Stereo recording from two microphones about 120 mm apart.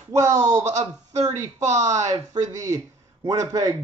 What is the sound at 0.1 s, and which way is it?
A man's voice, 30° right (ahead or behind).